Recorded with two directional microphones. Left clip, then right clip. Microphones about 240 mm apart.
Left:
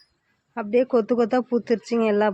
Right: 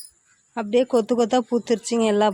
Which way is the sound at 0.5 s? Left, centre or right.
Centre.